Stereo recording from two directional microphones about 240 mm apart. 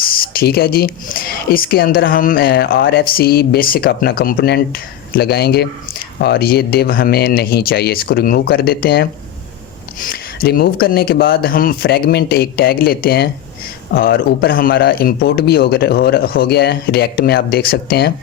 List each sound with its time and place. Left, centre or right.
0.3 s a woman's voice: left